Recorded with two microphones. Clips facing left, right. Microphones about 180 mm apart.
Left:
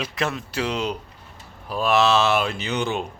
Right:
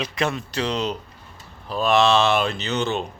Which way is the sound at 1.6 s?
10° left (ahead or behind).